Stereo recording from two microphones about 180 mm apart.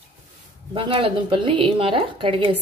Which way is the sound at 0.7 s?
30° right (ahead or behind).